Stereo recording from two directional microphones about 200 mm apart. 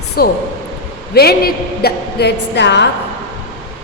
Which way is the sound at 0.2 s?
50° left (ahead or behind).